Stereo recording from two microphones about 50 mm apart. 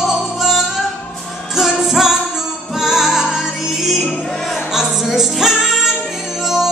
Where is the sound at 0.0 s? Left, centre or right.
Centre.